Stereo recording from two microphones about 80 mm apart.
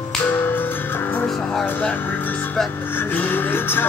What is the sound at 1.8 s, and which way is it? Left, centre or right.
Music, left.